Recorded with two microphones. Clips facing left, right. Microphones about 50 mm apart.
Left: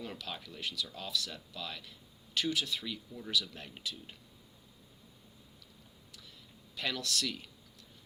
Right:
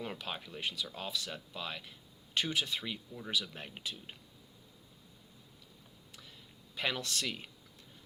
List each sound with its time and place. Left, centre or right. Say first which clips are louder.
0.0 s speech: right 2 dB; right
6.7 s speech: even; right